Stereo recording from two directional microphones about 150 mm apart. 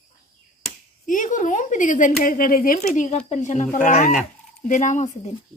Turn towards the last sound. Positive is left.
turn(degrees=50)  # may be behind; listen again after turning